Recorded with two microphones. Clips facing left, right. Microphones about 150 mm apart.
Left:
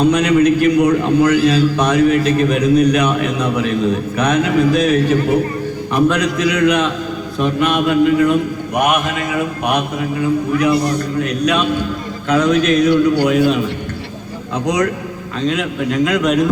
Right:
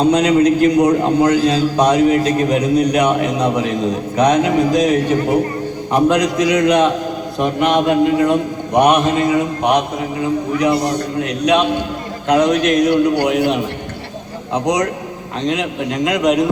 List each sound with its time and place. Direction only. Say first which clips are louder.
0.0 s a man's voice: even; 30° right (ahead or behind)
1.3 s a man's voice: left 1 dB; 15° right (ahead or behind)
12.3 s a man's voice: even; 15° right (ahead or behind)
14.5 s a man's voice: even; 35° right (ahead or behind)
15.4 s a man's voice: left 1 dB; 15° right (ahead or behind)